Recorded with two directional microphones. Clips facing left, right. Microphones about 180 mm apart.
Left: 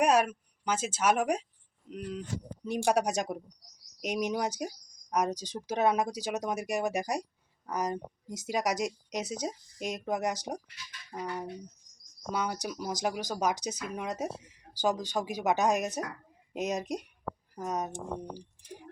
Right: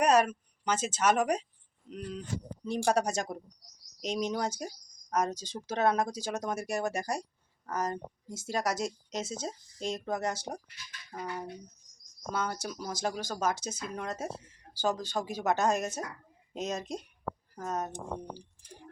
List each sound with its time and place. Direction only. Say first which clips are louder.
0.0 s speech: even; 10° left (ahead or behind)
12.3 s speech: left 1 dB; 15° left (ahead or behind)
18.3 s a sound: left 4 dB; 15° left (ahead or behind)